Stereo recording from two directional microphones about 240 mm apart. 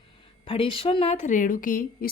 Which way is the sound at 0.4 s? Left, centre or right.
Left.